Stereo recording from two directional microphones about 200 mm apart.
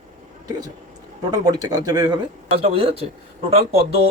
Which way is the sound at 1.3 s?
20° right (ahead or behind).